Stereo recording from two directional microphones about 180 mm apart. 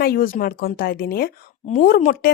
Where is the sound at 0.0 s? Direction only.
55° left (ahead or behind).